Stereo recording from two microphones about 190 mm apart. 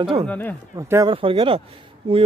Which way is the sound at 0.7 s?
15° right (ahead or behind).